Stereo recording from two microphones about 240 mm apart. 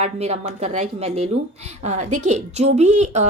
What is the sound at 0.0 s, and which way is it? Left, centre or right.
A woman's voice, right.